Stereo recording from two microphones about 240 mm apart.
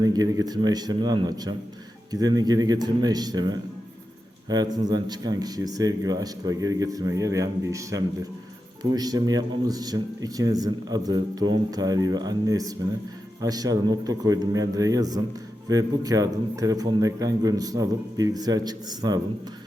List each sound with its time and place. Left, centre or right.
0.0 s speech: centre